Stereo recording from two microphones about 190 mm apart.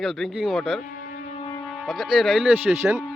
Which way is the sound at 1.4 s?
25° left (ahead or behind).